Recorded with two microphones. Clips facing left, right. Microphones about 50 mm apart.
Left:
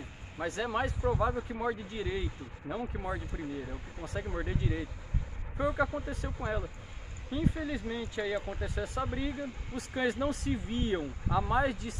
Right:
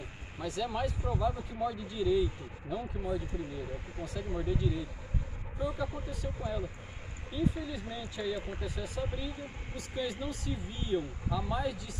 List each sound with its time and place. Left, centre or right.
0.4 s speech: left
4.0 s speech: left